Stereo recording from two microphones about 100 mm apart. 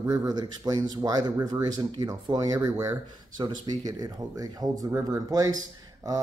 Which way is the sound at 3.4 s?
45° right (ahead or behind).